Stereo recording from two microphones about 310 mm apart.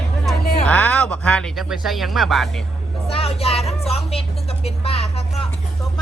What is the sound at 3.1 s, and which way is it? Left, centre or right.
Speech, centre.